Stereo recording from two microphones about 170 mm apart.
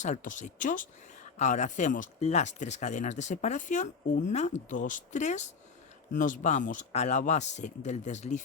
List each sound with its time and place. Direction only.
0.0 s speech: 50° left (ahead or behind)